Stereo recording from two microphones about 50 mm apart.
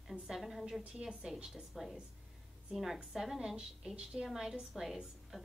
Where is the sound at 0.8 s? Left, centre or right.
Right.